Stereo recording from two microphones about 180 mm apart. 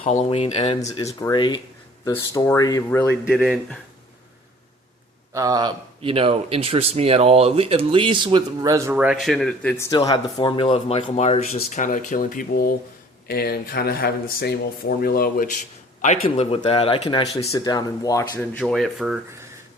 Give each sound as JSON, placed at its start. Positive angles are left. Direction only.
{"t": 0.0, "sound": "speech", "side_deg": 40}
{"t": 3.2, "sound": "speech", "side_deg": 0}
{"t": 5.3, "sound": "speech", "side_deg": -20}
{"t": 9.7, "sound": "speech", "side_deg": 15}
{"t": 16.0, "sound": "speech", "side_deg": 40}
{"t": 18.6, "sound": "speech", "side_deg": 0}